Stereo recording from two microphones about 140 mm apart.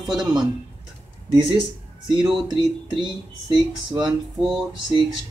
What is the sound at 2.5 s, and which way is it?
Speech, 35° right (ahead or behind).